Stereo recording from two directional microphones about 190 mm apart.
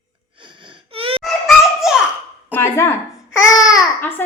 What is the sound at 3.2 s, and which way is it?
Babbling, 90° left.